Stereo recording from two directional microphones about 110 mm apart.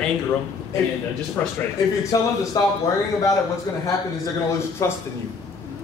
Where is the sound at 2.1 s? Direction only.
30° left (ahead or behind).